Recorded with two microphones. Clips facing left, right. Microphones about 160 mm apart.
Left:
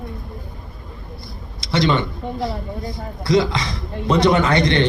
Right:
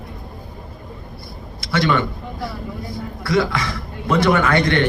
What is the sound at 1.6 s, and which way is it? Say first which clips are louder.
A man's voice: even; 20° left (ahead or behind).